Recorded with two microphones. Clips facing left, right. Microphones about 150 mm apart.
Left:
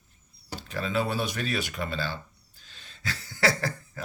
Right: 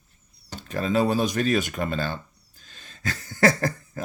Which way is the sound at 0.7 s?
40° right (ahead or behind).